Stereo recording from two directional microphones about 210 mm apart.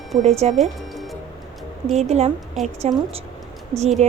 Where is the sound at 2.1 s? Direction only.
30° right (ahead or behind).